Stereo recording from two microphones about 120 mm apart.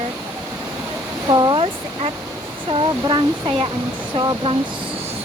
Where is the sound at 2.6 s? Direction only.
40° right (ahead or behind).